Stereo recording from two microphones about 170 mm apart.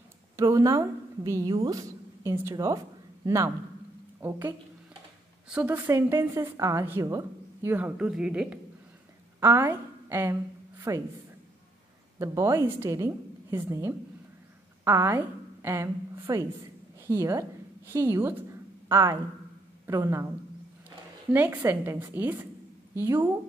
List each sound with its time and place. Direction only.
0.4 s a woman's voice: 20° right (ahead or behind)
12.2 s a woman's voice: 15° right (ahead or behind)
21.3 s a woman's voice: 10° right (ahead or behind)